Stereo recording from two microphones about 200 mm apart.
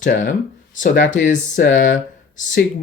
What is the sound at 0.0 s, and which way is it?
Speech, 40° left (ahead or behind).